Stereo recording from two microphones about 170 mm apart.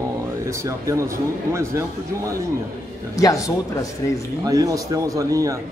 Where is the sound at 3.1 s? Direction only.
20° left (ahead or behind).